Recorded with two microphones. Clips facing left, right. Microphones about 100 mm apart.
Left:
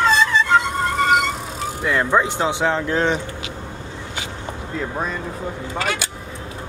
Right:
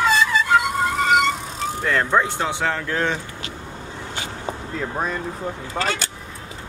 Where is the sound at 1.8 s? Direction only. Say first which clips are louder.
Left 2 dB; 15° left (ahead or behind).